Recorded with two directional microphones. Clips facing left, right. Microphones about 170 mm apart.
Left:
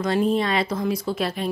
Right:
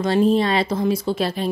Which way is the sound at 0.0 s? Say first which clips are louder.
Right 4 dB; 30° right (ahead or behind).